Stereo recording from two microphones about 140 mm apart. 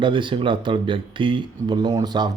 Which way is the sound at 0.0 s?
35° right (ahead or behind).